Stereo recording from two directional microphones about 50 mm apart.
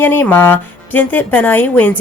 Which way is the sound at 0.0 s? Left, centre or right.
Left.